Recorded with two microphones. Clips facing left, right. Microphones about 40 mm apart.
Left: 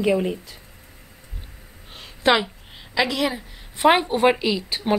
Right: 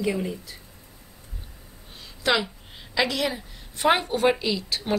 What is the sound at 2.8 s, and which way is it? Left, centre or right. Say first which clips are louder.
Speech: left 3 dB; centre.